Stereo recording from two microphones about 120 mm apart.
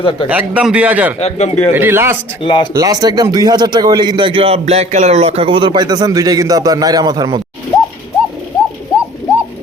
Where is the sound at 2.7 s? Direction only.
30° right (ahead or behind).